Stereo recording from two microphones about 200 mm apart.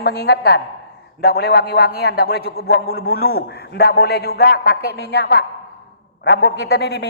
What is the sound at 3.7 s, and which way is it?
A man's voice, 55° left (ahead or behind).